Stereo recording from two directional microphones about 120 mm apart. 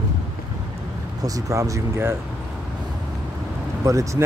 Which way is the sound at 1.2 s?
30° right (ahead or behind).